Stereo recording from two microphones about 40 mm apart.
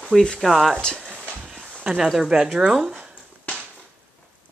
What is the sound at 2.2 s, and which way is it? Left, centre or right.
Speech, centre.